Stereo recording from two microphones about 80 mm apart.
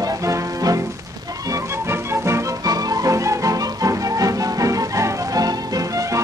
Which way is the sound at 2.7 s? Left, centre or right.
Right.